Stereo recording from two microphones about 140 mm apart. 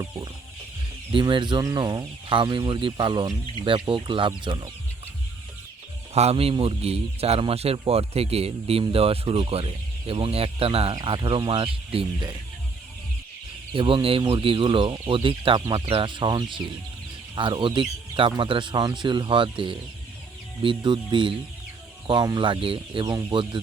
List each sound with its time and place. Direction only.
1.1 s speech: 35° right (ahead or behind)
6.1 s speech: 45° right (ahead or behind)
13.7 s speech: 40° right (ahead or behind)